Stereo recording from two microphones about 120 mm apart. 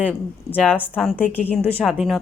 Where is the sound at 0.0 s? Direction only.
10° left (ahead or behind).